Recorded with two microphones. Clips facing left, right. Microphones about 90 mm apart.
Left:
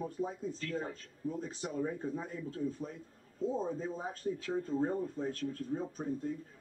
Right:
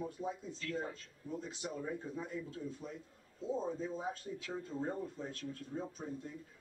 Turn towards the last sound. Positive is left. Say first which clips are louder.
# left 7 dB
turn(degrees=45)  # may be behind; listen again after turning